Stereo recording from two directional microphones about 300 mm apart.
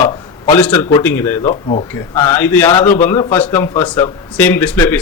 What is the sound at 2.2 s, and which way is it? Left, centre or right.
A man's voice, centre.